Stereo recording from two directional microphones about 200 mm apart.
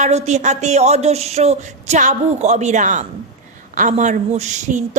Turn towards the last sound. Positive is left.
turn(degrees=-35)  # may be behind; listen again after turning